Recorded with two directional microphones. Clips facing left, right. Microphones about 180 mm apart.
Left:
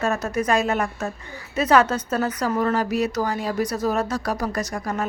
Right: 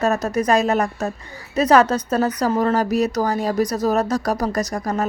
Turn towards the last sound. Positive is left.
turn(degrees=-40)  # may be behind; listen again after turning